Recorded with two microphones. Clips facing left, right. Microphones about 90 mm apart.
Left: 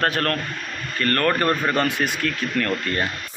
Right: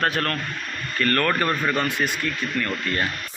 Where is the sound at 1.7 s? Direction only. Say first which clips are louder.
Left 2 dB; 60° left (ahead or behind); by 2.7 s 85° left.